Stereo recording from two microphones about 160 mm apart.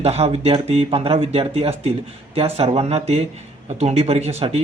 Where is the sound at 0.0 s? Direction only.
40° right (ahead or behind).